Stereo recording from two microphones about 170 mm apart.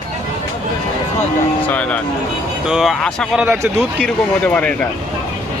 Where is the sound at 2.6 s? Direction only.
5° right (ahead or behind).